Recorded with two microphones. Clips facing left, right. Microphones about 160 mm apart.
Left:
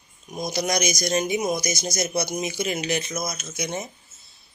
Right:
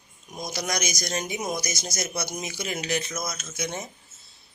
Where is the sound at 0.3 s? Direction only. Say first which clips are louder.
Left 5 dB; 20° left (ahead or behind).